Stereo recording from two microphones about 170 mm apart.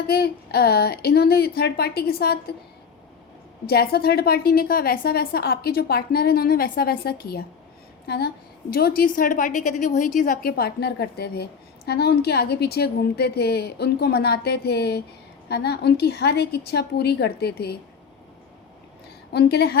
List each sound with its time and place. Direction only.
0.1 s a woman's voice: 70° left (ahead or behind)
3.7 s a woman's voice: 70° left (ahead or behind)
9.0 s a woman's voice: 55° left (ahead or behind); by 17.7 s 70° left (ahead or behind)
19.3 s a woman's voice: 75° left (ahead or behind)